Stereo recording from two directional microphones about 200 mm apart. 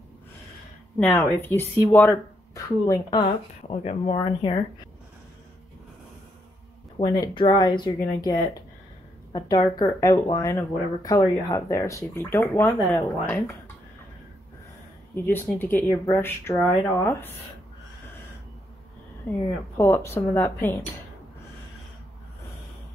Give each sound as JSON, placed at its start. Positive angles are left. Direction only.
{"t": 0.9, "sound": "speech", "side_deg": 5}
{"t": 7.0, "sound": "a woman's voice", "side_deg": 30}
{"t": 15.1, "sound": "speech", "side_deg": 10}
{"t": 19.8, "sound": "speech", "side_deg": 10}